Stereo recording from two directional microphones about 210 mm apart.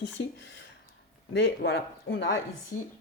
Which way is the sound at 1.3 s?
50° left (ahead or behind).